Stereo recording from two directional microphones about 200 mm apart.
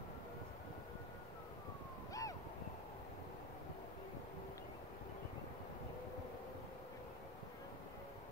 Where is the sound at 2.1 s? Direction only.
15° left (ahead or behind).